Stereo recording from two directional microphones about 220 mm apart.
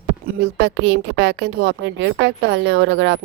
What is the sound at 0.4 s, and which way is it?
A woman's voice, 55° right (ahead or behind).